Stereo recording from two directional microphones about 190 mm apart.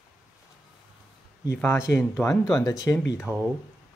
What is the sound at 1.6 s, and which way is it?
Speech, 15° left (ahead or behind).